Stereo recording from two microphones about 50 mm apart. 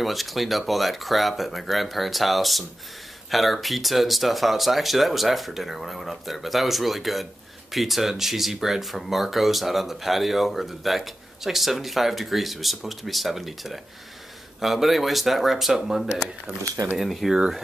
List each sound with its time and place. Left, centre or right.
0.0 s speech: centre
16.8 s speech: right
17.3 s speech: centre